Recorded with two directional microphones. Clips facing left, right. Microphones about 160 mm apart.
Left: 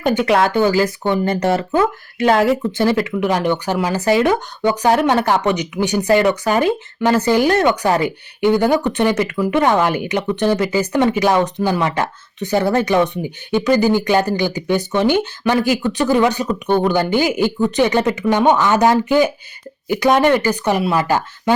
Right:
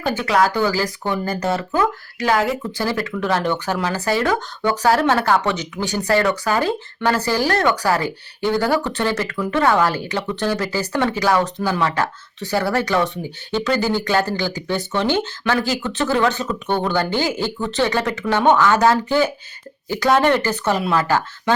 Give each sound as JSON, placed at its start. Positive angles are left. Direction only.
{"t": 0.3, "sound": "speech", "side_deg": 25}